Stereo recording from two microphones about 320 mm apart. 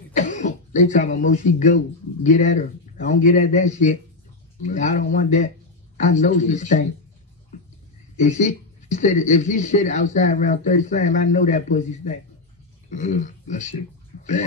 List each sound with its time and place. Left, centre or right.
0.1 s speech: left
8.2 s speech: left
14.1 s a sound: left